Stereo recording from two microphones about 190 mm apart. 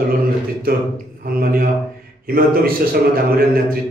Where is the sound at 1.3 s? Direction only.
50° right (ahead or behind).